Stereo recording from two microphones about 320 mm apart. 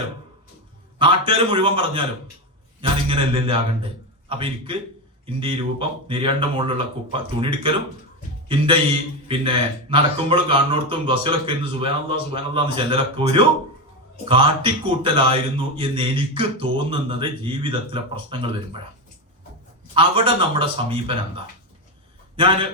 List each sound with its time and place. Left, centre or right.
0.9 s a man's voice: centre
19.9 s a man's voice: centre